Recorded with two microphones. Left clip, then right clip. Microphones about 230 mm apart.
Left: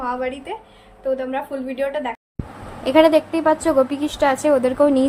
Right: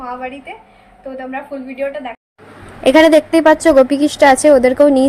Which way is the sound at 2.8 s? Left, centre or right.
Right.